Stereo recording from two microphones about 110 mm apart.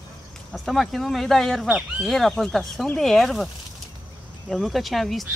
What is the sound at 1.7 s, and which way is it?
Speech, 10° right (ahead or behind).